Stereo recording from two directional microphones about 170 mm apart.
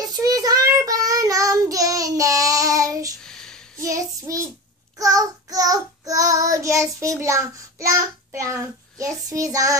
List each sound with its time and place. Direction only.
0.0 s child singing: 20° right (ahead or behind)
3.3 s a sound: 5° left (ahead or behind)
3.8 s child singing: 20° right (ahead or behind)